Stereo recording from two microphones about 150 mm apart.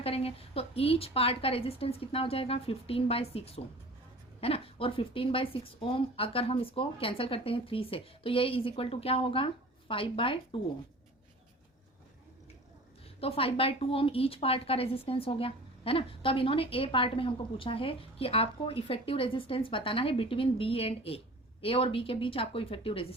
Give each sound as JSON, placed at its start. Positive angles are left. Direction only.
{"t": 0.0, "sound": "a woman's voice", "side_deg": 40}
{"t": 13.1, "sound": "a woman's voice", "side_deg": 40}